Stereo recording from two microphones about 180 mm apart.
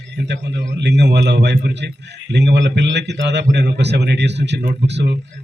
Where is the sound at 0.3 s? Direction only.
75° right (ahead or behind).